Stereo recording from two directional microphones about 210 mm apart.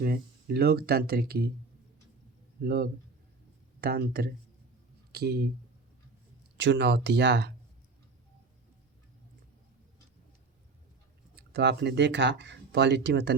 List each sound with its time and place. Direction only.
0.0 s speech: 45° right (ahead or behind)
2.6 s speech: 45° right (ahead or behind)
6.6 s speech: 55° right (ahead or behind)
11.3 s speech: 50° right (ahead or behind)